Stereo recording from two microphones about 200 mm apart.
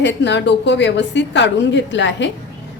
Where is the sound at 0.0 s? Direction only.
60° left (ahead or behind).